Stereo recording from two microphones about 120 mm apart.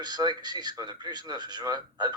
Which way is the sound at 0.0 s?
35° right (ahead or behind).